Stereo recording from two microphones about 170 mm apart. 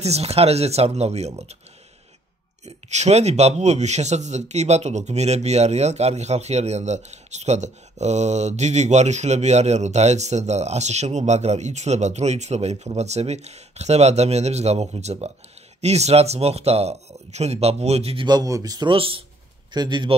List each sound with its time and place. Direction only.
0.0 s speech: 40° right (ahead or behind)
2.6 s speech: 40° right (ahead or behind)